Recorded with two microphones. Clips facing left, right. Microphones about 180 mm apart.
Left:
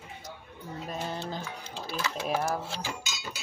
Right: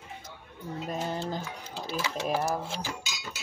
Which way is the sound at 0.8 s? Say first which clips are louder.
Right 3 dB; 15° right (ahead or behind).